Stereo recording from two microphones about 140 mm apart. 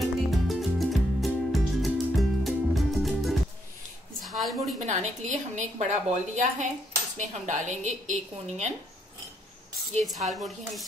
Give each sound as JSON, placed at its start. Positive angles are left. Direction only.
{"t": 0.3, "sound": "music", "side_deg": 0}
{"t": 4.3, "sound": "a sound", "side_deg": 0}
{"t": 4.7, "sound": "a woman's voice", "side_deg": -55}
{"t": 10.0, "sound": "speech", "side_deg": 0}